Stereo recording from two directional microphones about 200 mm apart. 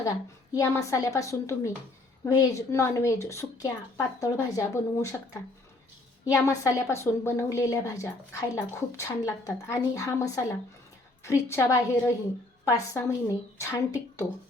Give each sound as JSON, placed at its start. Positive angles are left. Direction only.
{"t": 0.5, "sound": "a woman's voice", "side_deg": 15}